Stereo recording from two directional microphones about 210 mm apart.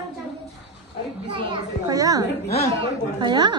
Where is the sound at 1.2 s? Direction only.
25° right (ahead or behind).